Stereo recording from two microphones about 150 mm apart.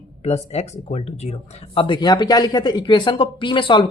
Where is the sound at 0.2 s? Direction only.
45° left (ahead or behind).